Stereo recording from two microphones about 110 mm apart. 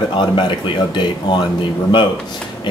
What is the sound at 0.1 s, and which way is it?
Speech, 45° left (ahead or behind).